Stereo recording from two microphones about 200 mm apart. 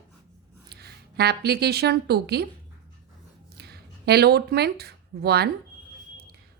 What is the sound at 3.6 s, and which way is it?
Speech, 55° right (ahead or behind).